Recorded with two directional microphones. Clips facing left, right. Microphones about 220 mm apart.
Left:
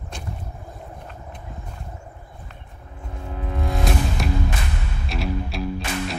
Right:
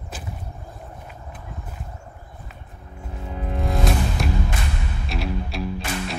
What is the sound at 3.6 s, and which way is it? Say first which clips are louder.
Music: right 1 dB; centre (ahead or behind).